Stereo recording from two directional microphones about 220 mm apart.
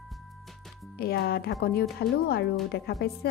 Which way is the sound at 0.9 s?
45° left (ahead or behind).